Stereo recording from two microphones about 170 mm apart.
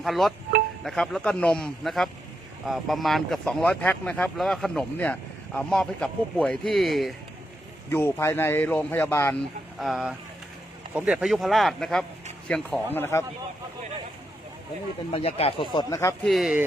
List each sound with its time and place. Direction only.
0.0 s speech: centre (ahead or behind)
7.9 s speech: 15° left (ahead or behind)
9.7 s speech: centre (ahead or behind)
15.1 s speech: 35° left (ahead or behind); by 16.1 s 20° left (ahead or behind)
16.2 s speech: centre (ahead or behind)